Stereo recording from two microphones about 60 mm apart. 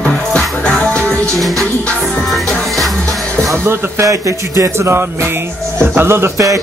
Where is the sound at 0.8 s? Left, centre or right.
Centre.